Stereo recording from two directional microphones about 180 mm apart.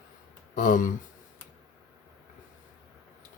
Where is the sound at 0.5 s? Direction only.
45° left (ahead or behind).